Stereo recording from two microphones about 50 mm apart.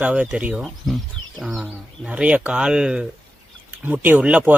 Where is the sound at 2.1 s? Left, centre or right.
Right.